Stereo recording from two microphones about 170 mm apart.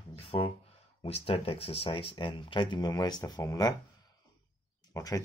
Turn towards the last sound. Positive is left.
turn(degrees=20)  # may be behind; listen again after turning